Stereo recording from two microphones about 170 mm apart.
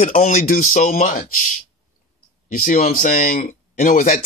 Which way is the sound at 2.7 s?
50° left (ahead or behind).